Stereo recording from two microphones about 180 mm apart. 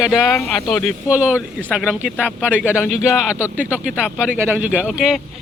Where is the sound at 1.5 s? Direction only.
5° left (ahead or behind).